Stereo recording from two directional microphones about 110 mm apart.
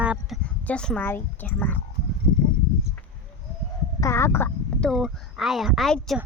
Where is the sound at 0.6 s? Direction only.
10° left (ahead or behind).